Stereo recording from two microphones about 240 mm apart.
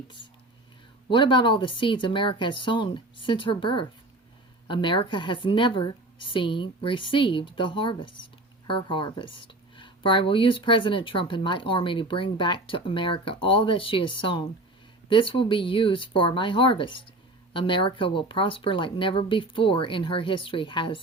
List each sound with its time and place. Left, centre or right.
1.1 s speech: centre